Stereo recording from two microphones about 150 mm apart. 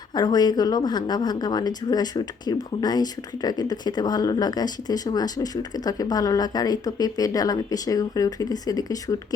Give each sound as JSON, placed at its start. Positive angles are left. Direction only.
{"t": 0.1, "sound": "speech", "side_deg": 25}